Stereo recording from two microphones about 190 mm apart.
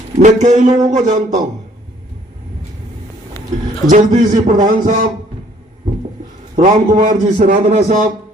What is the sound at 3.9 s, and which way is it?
A man's voice, 45° right (ahead or behind).